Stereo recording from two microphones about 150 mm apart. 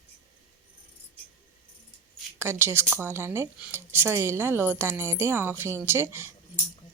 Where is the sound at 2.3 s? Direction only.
15° right (ahead or behind).